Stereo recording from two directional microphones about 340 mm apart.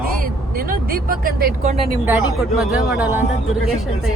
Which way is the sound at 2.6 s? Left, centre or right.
Centre.